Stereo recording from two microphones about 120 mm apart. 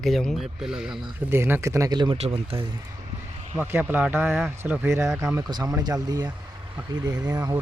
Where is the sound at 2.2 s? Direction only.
55° right (ahead or behind).